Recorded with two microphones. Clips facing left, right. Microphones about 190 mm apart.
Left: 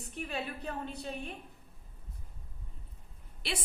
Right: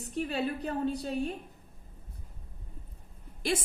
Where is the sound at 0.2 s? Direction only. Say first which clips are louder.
Right 7 dB; 35° right (ahead or behind).